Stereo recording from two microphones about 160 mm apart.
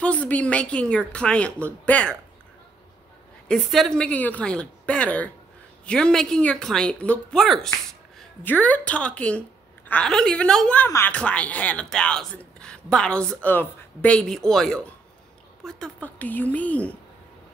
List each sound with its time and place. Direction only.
0.0 s speech: 10° left (ahead or behind)
3.4 s speech: 5° left (ahead or behind)